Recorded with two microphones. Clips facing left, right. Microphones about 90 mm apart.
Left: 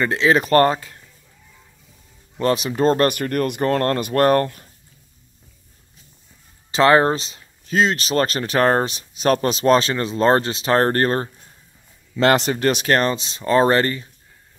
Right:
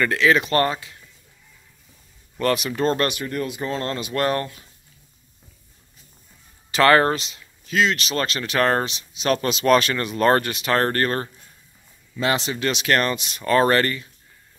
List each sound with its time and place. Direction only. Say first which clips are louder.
0.0 s speech: left 1 dB; 30° left (ahead or behind)
2.3 s speech: left 2 dB; 30° left (ahead or behind)
3.2 s speech: left 6 dB; 60° left (ahead or behind)
6.7 s speech: left 2 dB; 25° left (ahead or behind)
7.2 s speech: left 2 dB; 35° left (ahead or behind)
12.2 s speech: left 6 dB; 55° left (ahead or behind); by 14.0 s 30° left (ahead or behind)